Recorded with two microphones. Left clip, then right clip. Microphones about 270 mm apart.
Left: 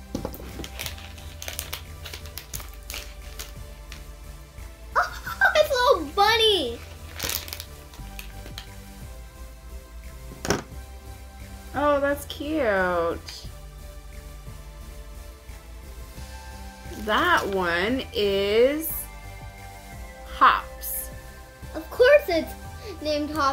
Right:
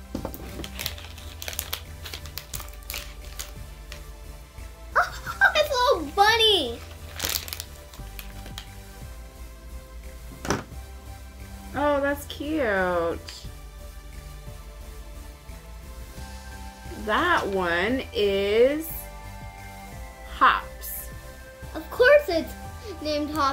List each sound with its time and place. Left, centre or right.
0.6 s a sound: centre
1.4 s music: centre
4.9 s a sound: centre
7.2 s crunch: centre
11.7 s music: centre
17.0 s speech: centre
20.3 s music: centre
21.7 s music: centre
23.0 s speech: centre